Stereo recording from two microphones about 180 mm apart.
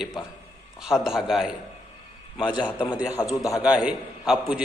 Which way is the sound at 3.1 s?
20° left (ahead or behind).